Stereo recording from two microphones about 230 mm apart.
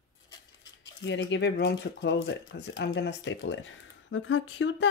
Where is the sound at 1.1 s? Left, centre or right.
Left.